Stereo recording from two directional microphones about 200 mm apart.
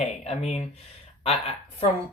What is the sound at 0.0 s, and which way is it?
Speech, 35° left (ahead or behind).